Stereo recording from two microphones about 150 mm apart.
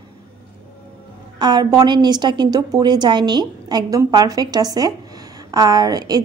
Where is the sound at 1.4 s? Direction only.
30° right (ahead or behind).